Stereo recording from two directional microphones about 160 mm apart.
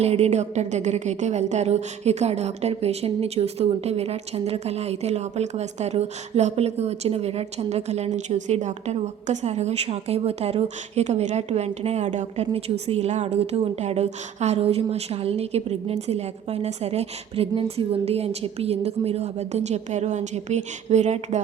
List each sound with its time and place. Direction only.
0.0 s a woman's voice: 40° right (ahead or behind)